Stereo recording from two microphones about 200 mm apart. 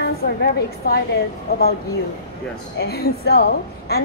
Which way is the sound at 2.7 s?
55° left (ahead or behind).